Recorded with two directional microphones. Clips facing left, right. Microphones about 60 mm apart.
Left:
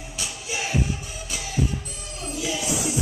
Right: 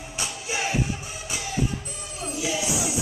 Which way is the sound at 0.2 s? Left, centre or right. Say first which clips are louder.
Right 2 dB; right.